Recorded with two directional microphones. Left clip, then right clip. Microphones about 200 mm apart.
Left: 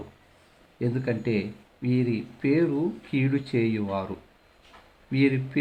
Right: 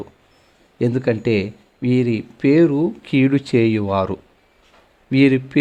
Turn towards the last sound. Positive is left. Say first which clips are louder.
# right 9 dB
turn(degrees=-40)  # may be behind; listen again after turning